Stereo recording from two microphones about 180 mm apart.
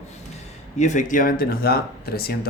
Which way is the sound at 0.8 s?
45° left (ahead or behind).